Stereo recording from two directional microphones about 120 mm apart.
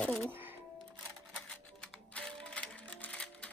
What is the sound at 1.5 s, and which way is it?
Music, 5° left (ahead or behind).